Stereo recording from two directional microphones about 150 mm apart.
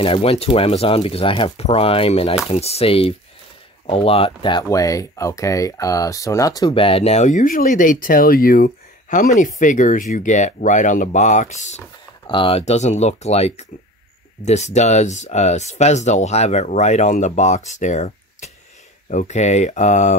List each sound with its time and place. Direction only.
0.0 s speech: 40° left (ahead or behind); by 6.7 s 25° left (ahead or behind)
6.7 s speech: 40° left (ahead or behind); by 9.3 s 70° left (ahead or behind)
9.3 s speech: 60° left (ahead or behind)
12.3 s speech: 35° left (ahead or behind); by 20.2 s 55° left (ahead or behind)